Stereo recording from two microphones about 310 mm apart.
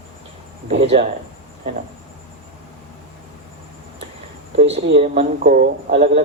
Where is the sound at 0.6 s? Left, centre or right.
Centre.